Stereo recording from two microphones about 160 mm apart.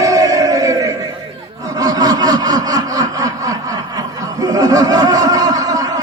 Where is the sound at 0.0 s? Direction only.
20° right (ahead or behind).